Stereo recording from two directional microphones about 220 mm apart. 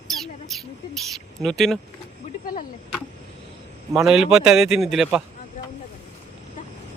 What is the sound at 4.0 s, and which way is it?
Speech, centre (ahead or behind).